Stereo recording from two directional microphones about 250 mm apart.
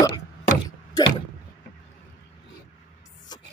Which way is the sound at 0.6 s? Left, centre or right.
Centre.